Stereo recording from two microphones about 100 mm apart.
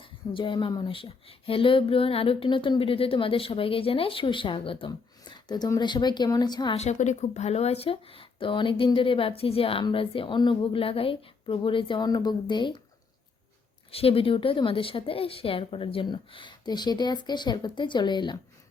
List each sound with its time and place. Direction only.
0.0 s speech: 55° left (ahead or behind)
4.9 s a sound: 45° left (ahead or behind)
5.8 s speech: 45° left (ahead or behind)
7.4 s speech: 90° left; by 12.0 s 55° left (ahead or behind)
12.0 s speech: 40° left (ahead or behind)
13.9 s speech: 70° left (ahead or behind); by 18.3 s 50° left (ahead or behind)